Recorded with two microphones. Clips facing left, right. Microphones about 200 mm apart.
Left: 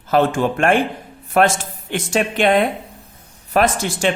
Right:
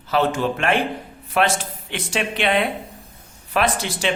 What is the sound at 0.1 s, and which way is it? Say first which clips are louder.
Speech: left 4 dB; 50° left (ahead or behind).